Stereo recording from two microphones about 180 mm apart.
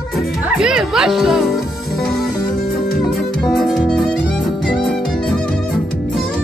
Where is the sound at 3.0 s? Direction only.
Centre (ahead or behind).